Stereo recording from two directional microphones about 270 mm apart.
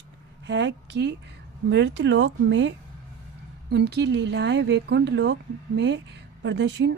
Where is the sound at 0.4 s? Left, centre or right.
Right.